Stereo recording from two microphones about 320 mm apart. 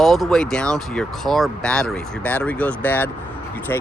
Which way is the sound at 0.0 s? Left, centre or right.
Centre.